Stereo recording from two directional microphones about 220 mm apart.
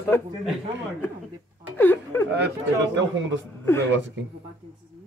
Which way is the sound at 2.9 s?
55° right (ahead or behind).